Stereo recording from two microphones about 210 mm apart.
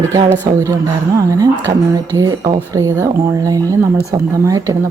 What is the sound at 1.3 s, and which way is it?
Speech, 15° right (ahead or behind).